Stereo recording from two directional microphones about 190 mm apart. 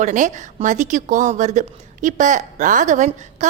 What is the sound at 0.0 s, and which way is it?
A woman's voice, 40° right (ahead or behind).